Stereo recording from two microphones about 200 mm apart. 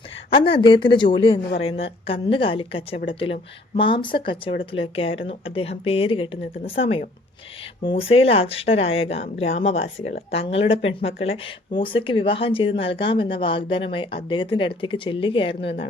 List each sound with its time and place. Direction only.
0.3 s speech: 25° left (ahead or behind)